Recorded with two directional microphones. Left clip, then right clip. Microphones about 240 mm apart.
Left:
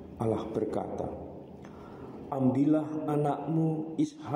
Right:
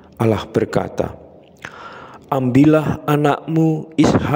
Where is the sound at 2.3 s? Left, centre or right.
Right.